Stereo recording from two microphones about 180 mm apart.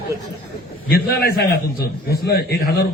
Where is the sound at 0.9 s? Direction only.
60° left (ahead or behind).